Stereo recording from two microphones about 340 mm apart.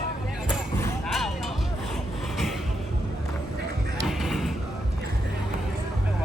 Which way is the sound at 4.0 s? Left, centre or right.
Centre.